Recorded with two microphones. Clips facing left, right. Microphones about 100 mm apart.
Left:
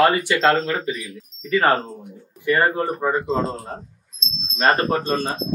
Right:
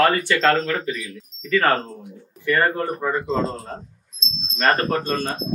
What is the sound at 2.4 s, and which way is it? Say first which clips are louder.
Speech: left 1 dB; 20° left (ahead or behind).